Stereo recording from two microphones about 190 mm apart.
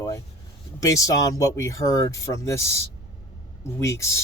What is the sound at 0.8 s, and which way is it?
Speech, 15° left (ahead or behind).